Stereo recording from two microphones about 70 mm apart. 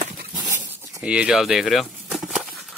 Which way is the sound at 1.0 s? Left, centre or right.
Centre.